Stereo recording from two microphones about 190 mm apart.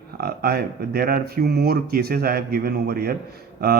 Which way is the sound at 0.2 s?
55° right (ahead or behind).